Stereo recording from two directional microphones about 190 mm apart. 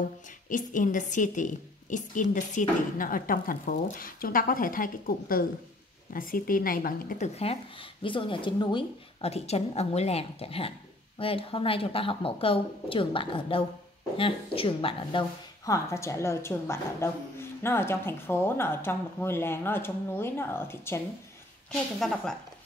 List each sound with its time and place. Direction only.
0.5 s a woman's voice: 45° left (ahead or behind)
8.0 s a woman's voice: 25° left (ahead or behind)
15.6 s a woman's voice: 15° left (ahead or behind)
22.0 s a woman's voice: 5° left (ahead or behind)